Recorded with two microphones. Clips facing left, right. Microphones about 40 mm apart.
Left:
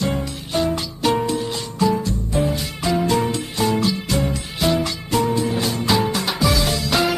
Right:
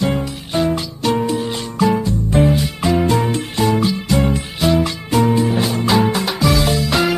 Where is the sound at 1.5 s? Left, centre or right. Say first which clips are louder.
Right 3 dB; right.